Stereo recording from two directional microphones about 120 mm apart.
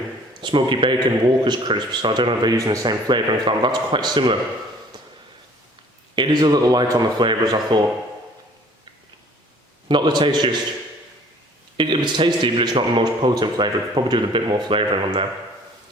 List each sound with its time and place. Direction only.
0.4 s a man's voice: 45° right (ahead or behind)
6.1 s a man's voice: 40° right (ahead or behind)
9.9 s a man's voice: 40° right (ahead or behind)
11.8 s a man's voice: 40° right (ahead or behind)